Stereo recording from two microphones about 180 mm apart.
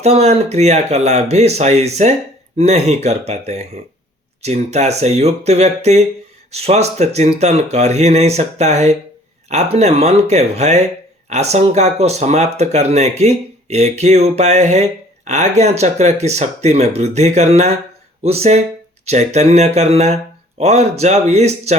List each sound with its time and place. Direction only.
0.0 s speech: 35° right (ahead or behind)